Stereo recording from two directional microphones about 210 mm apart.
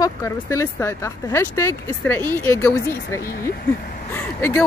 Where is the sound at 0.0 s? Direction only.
15° left (ahead or behind).